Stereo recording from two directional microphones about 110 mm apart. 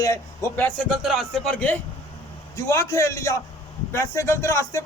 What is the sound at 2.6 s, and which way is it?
A man's voice, 30° left (ahead or behind).